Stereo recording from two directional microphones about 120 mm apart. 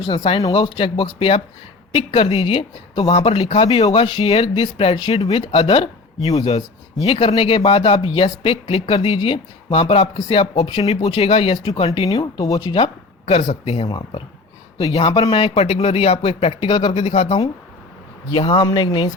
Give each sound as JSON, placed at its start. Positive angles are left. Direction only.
{"t": 0.0, "sound": "speech", "side_deg": 40}
{"t": 10.8, "sound": "speech", "side_deg": 55}
{"t": 12.0, "sound": "speech", "side_deg": 30}
{"t": 12.7, "sound": "speech", "side_deg": 50}
{"t": 18.3, "sound": "speech", "side_deg": 40}